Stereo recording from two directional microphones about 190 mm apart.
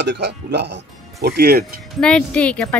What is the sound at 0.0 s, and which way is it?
Speech, 65° right (ahead or behind).